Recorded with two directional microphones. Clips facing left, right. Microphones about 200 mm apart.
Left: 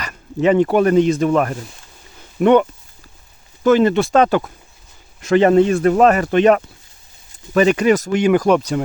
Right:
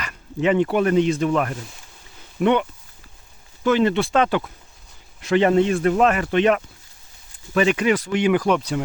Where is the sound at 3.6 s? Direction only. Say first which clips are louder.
Left 5 dB; 45° left (ahead or behind).